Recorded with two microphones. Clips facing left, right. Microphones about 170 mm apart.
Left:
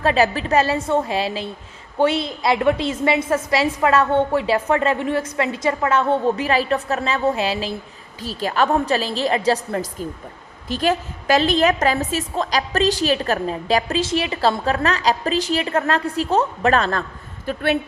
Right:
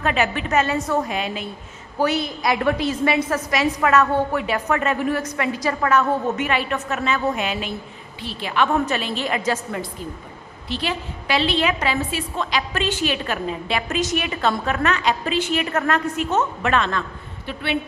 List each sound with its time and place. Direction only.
0.0 s a woman's voice: 35° left (ahead or behind)